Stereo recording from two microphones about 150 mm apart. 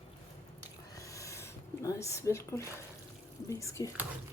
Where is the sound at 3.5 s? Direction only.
20° left (ahead or behind).